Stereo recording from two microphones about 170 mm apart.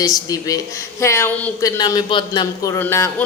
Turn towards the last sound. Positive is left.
turn(degrees=15)  # may be behind; listen again after turning